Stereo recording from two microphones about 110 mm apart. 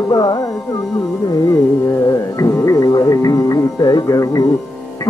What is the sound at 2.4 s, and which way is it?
Music, 30° left (ahead or behind).